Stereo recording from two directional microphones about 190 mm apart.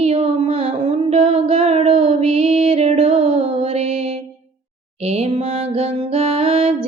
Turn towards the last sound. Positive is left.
turn(degrees=-30)  # may be behind; listen again after turning